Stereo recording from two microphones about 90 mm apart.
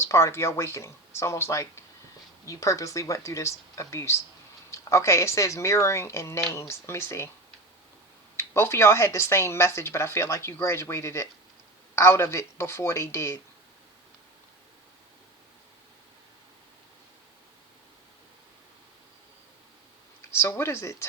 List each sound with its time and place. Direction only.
0.0 s speech: 30° left (ahead or behind)
8.4 s speech: 25° left (ahead or behind)
20.3 s speech: 30° left (ahead or behind)